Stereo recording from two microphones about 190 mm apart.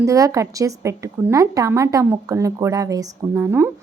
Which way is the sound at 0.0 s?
15° right (ahead or behind).